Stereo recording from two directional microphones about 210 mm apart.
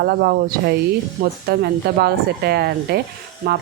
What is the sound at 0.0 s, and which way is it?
A woman's voice, 45° right (ahead or behind).